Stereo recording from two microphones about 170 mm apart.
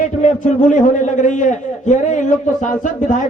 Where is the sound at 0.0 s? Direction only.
45° left (ahead or behind).